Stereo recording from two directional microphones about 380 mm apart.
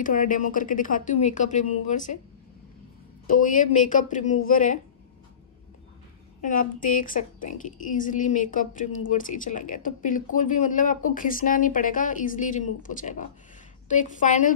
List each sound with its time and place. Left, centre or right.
0.0 s a woman's voice: left
3.3 s a woman's voice: left
6.4 s a woman's voice: left